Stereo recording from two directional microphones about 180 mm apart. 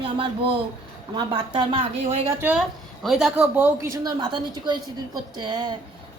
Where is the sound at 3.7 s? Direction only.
15° right (ahead or behind).